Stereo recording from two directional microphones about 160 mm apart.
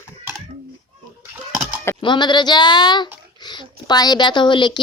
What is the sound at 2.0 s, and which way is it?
Speech, 30° left (ahead or behind).